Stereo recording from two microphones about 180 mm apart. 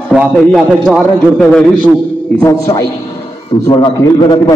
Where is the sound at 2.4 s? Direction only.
20° left (ahead or behind).